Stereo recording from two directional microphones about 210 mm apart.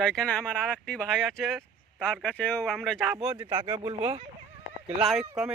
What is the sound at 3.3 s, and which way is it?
Speech, 20° right (ahead or behind).